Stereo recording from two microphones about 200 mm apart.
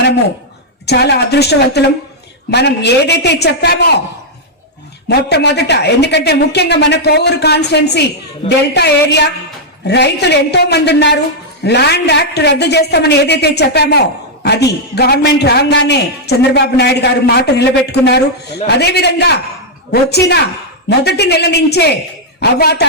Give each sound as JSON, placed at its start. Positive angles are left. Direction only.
{"t": 0.9, "sound": "a man's voice", "side_deg": 55}
{"t": 5.0, "sound": "a man's voice", "side_deg": 55}